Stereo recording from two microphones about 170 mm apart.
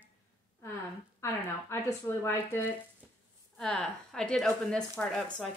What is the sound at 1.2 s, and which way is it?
Speech, 15° left (ahead or behind).